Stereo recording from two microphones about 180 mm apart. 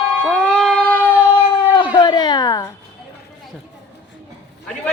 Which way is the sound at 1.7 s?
25° left (ahead or behind).